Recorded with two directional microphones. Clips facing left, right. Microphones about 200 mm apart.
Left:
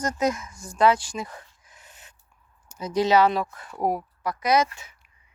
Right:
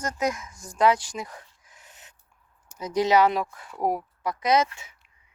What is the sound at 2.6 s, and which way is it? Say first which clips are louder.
Speech: left 1 dB; 15° right (ahead or behind).